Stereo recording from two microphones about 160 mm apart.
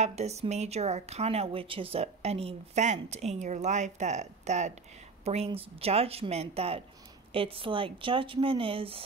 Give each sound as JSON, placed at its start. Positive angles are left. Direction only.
{"t": 0.0, "sound": "a woman's voice", "side_deg": -45}